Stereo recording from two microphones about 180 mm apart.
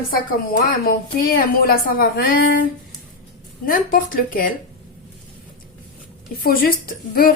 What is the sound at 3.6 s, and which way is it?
Speech, 50° left (ahead or behind).